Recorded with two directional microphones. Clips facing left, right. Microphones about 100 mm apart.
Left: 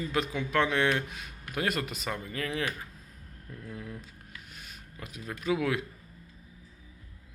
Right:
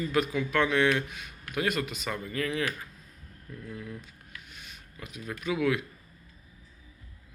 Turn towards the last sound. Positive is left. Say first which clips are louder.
# right 1 dB
turn(degrees=35)  # may be behind; listen again after turning